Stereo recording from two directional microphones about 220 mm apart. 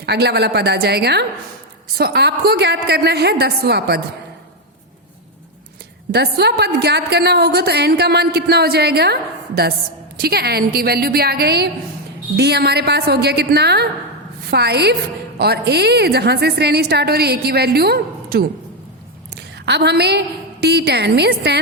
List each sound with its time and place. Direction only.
0.0 s a woman's voice: 50° right (ahead or behind)
6.1 s a woman's voice: 50° right (ahead or behind)
10.2 s a woman's voice: 45° right (ahead or behind)